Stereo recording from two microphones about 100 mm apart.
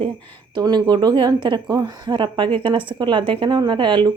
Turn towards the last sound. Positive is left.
turn(degrees=-50)  # may be behind; listen again after turning